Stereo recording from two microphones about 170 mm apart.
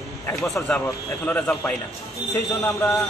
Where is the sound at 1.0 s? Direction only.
10° left (ahead or behind).